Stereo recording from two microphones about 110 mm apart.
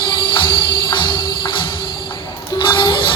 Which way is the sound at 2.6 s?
45° left (ahead or behind).